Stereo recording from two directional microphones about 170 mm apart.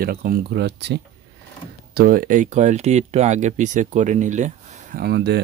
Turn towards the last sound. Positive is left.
turn(degrees=-80)